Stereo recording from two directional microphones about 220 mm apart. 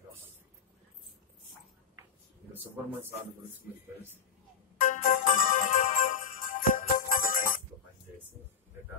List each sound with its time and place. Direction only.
4.7 s music: 35° left (ahead or behind)